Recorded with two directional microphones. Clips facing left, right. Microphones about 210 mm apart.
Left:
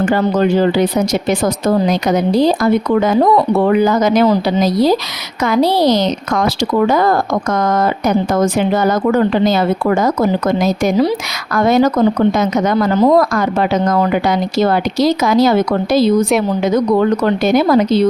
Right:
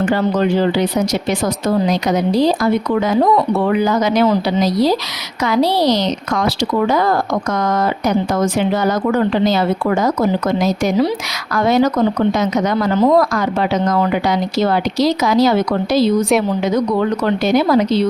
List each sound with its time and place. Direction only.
0.0 s a woman's voice: 45° left (ahead or behind)
3.7 s a woman's voice: 50° left (ahead or behind)
17.2 s a woman's voice: 50° left (ahead or behind)